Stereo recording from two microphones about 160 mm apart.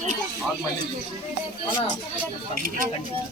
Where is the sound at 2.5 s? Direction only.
60° right (ahead or behind).